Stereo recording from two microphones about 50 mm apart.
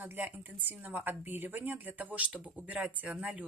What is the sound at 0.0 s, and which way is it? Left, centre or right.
A woman's voice, right.